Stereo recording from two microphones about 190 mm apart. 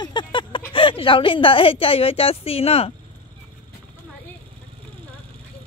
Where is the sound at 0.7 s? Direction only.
25° left (ahead or behind).